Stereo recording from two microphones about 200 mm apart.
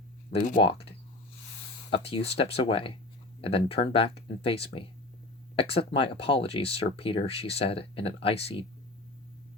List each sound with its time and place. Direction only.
0.3 s speech: 40° left (ahead or behind)
2.0 s speech: 30° left (ahead or behind)